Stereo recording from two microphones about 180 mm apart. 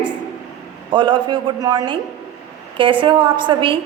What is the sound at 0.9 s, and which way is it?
A woman's voice, 25° right (ahead or behind).